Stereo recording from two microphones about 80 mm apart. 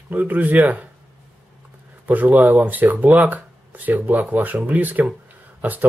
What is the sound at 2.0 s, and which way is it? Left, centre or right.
Speech, right.